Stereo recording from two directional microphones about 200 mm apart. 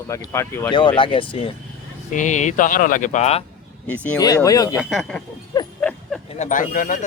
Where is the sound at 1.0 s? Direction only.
25° left (ahead or behind).